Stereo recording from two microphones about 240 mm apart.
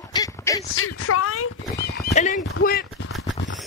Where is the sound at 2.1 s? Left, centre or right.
Left.